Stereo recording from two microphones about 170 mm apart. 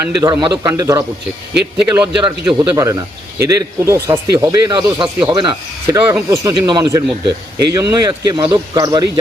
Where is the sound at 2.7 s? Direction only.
20° right (ahead or behind).